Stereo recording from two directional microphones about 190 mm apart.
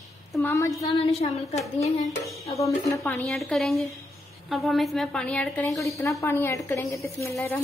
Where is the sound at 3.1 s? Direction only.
Centre (ahead or behind).